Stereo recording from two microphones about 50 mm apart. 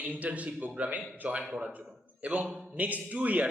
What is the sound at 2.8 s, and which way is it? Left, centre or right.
Speech, right.